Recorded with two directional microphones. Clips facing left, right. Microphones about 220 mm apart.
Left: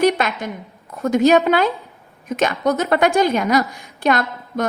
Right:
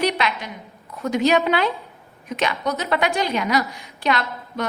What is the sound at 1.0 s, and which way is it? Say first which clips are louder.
A woman's voice: left 5 dB; 45° left (ahead or behind).